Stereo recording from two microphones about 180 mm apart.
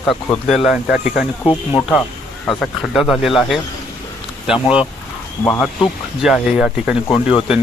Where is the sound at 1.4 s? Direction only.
25° left (ahead or behind).